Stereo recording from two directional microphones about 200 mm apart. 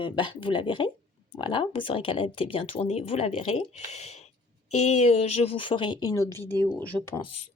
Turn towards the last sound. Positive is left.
turn(degrees=0)  # may be behind; listen again after turning